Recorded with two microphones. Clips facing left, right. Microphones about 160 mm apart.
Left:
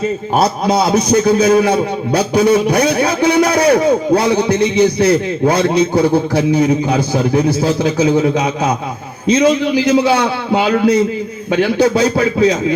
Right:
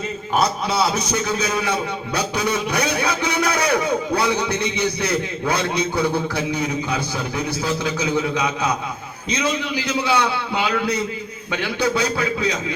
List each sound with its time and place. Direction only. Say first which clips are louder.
0.3 s a man's voice: left 6 dB; 45° left (ahead or behind)